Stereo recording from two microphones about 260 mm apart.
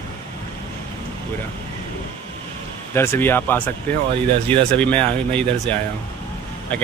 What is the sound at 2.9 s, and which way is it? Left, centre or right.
Speech, centre.